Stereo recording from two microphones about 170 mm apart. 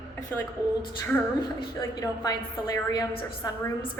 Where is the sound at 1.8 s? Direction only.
20° left (ahead or behind).